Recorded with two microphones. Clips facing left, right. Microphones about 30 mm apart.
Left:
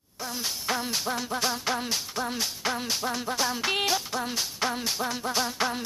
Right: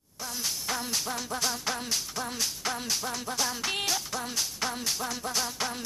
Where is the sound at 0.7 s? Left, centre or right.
Centre.